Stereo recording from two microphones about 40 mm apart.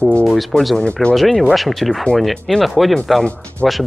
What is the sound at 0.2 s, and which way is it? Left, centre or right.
Speech, centre.